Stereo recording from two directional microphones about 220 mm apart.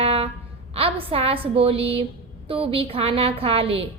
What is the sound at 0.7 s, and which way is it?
A woman's voice, 25° right (ahead or behind).